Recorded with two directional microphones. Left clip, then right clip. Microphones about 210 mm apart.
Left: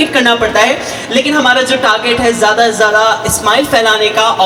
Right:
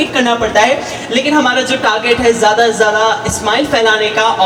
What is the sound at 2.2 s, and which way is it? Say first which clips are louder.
Speech: even; 45° left (ahead or behind).